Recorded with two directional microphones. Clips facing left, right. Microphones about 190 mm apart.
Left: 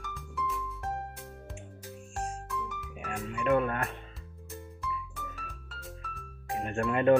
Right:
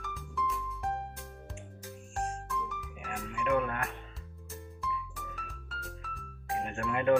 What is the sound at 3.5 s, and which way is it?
Music, 40° left (ahead or behind).